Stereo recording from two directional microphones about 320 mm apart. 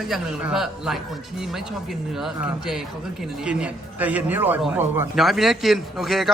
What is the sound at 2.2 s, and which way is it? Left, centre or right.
A man's voice, centre.